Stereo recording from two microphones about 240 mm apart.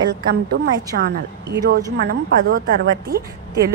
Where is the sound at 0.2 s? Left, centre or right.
Right.